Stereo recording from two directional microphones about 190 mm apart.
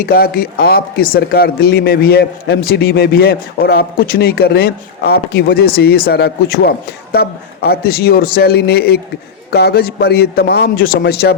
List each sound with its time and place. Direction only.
0.0 s speech: 50° left (ahead or behind)